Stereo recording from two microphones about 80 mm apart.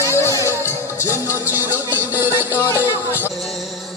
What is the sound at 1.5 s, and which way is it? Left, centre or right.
Music, right.